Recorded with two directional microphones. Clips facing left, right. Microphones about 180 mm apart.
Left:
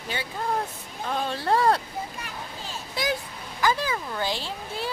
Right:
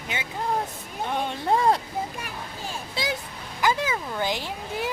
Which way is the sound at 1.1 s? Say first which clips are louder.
Even; 15° right (ahead or behind).